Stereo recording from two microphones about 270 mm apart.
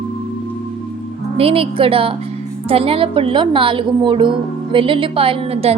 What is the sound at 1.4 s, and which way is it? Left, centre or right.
A woman's voice, right.